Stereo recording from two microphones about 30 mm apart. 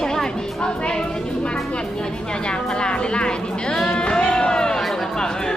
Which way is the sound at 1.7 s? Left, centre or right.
Left.